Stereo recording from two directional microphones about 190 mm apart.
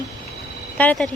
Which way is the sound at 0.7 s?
10° left (ahead or behind).